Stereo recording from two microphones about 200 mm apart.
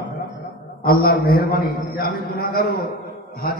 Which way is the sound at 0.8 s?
45° left (ahead or behind).